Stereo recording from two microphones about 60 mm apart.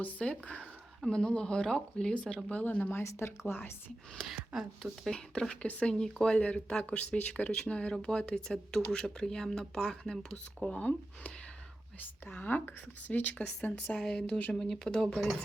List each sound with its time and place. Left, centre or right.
0.0 s speech: left
3.0 s speech: left
4.3 s speech: centre
5.1 s speech: centre
10.3 s speech: centre
12.4 s speech: left
14.5 s speech: centre